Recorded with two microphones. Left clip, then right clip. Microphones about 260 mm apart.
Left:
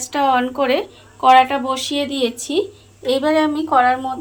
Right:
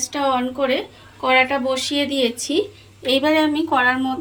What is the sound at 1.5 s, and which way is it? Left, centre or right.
Speech, centre.